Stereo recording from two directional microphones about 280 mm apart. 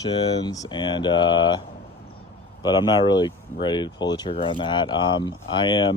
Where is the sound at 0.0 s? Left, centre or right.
Centre.